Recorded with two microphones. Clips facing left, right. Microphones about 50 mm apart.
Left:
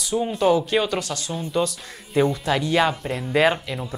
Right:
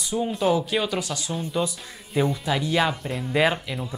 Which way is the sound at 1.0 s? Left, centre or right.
Centre.